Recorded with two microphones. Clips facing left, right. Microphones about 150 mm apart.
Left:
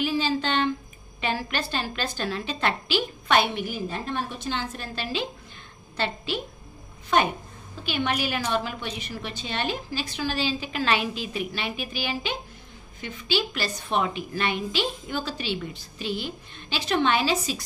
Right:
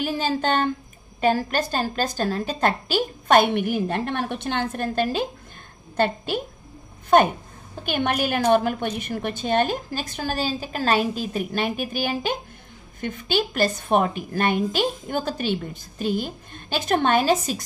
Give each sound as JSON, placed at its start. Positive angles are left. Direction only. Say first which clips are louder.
{"t": 0.0, "sound": "a woman's voice", "louder": "right 2 dB", "side_deg": -50}